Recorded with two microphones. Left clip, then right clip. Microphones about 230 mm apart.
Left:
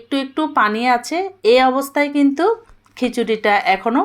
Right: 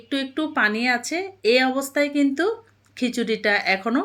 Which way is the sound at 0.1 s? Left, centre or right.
Centre.